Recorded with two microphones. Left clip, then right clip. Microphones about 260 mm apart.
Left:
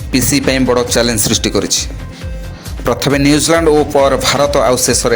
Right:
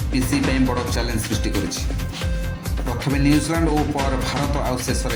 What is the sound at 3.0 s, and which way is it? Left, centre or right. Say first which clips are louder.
Speech: left 7 dB; left.